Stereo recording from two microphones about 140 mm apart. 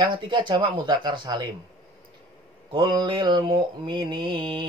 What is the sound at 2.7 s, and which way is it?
Mantra, 35° right (ahead or behind).